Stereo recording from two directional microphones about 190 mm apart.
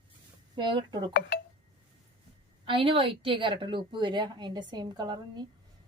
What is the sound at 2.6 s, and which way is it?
Speech, 30° right (ahead or behind).